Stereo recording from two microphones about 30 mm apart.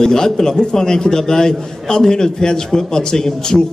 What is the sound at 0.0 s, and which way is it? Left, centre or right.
A man's voice, left.